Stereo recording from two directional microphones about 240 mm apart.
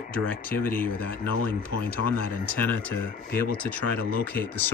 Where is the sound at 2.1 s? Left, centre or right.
Centre.